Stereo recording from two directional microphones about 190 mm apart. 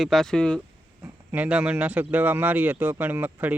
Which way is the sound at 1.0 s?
10° right (ahead or behind).